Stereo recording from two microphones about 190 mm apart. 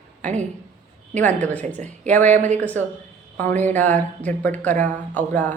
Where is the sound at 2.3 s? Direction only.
40° right (ahead or behind).